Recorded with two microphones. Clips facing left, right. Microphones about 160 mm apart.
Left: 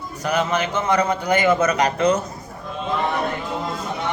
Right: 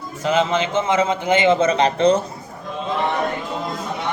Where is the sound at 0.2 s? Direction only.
20° right (ahead or behind).